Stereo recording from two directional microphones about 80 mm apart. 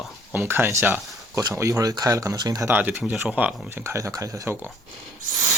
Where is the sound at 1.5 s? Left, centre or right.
Right.